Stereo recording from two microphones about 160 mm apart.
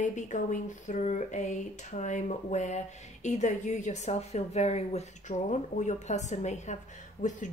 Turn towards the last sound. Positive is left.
turn(degrees=50)  # may be behind; listen again after turning